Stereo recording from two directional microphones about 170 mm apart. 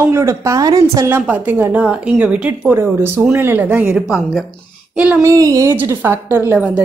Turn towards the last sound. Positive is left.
turn(degrees=-10)  # may be behind; listen again after turning